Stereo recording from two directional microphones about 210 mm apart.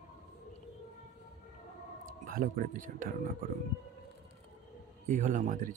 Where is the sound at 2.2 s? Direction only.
45° right (ahead or behind).